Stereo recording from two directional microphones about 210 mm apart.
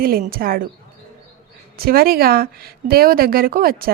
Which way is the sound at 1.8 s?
45° right (ahead or behind).